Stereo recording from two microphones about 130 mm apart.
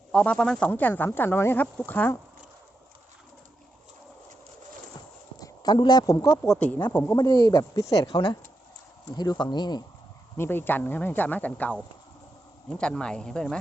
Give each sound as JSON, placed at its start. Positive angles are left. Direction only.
{"t": 0.1, "sound": "speech", "side_deg": 5}
{"t": 5.4, "sound": "a sound", "side_deg": 35}
{"t": 6.4, "sound": "speech", "side_deg": 5}
{"t": 6.9, "sound": "speech", "side_deg": 20}
{"t": 10.3, "sound": "speech", "side_deg": 15}